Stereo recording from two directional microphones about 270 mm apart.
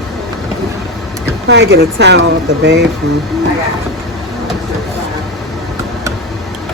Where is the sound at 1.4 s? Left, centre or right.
Right.